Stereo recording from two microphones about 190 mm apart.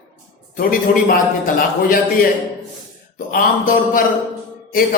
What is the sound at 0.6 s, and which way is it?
A man's voice, 45° left (ahead or behind).